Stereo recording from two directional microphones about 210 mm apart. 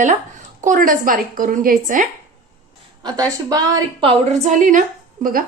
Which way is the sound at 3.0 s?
20° right (ahead or behind).